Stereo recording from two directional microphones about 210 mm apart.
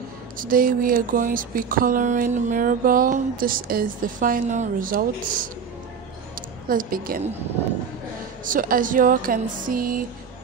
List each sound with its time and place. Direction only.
0.4 s speech: 40° right (ahead or behind)
6.7 s speech: 40° right (ahead or behind)
8.5 s speech: 40° right (ahead or behind)